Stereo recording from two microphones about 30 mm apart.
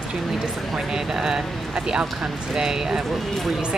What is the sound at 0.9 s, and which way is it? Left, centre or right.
Speech, right.